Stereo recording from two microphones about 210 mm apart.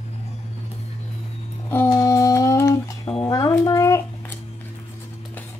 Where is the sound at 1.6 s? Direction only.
10° left (ahead or behind).